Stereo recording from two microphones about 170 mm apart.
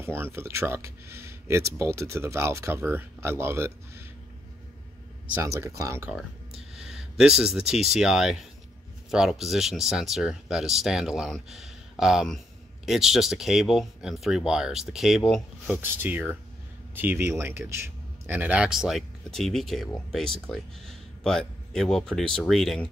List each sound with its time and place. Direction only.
0.0 s speech: 15° right (ahead or behind)
5.3 s speech: 15° right (ahead or behind)
6.7 s speech: 5° right (ahead or behind)
15.8 s speech: 10° right (ahead or behind)